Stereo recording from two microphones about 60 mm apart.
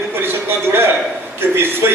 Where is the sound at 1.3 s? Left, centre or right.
Right.